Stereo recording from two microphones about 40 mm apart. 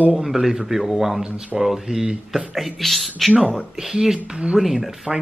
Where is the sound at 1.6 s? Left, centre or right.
Centre.